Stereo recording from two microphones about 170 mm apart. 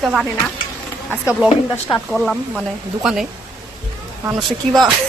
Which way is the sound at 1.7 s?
5° left (ahead or behind).